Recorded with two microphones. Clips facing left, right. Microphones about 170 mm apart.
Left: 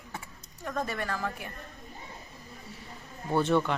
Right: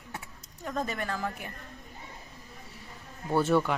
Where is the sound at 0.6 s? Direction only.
15° right (ahead or behind).